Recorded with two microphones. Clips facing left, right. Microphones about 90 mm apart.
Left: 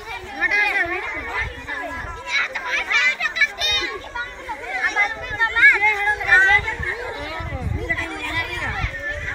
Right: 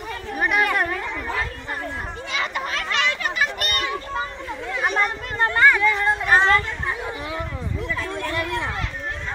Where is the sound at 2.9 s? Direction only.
50° right (ahead or behind).